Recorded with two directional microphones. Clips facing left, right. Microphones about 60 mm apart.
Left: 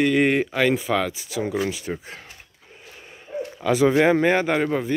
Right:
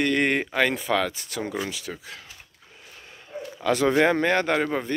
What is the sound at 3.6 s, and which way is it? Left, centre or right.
Speech, centre.